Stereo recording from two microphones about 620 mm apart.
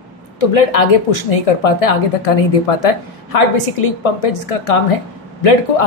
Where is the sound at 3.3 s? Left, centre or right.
Left.